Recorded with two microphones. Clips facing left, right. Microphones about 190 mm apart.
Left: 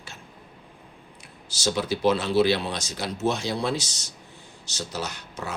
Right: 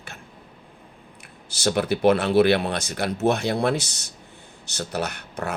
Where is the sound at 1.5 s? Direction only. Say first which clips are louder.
Right 4 dB; 60° right (ahead or behind).